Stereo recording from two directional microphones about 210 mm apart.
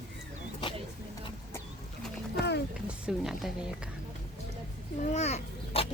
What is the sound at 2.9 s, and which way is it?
Speech, 5° right (ahead or behind).